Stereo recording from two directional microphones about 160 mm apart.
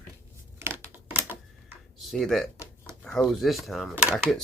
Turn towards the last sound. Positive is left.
turn(degrees=-5)  # may be behind; listen again after turning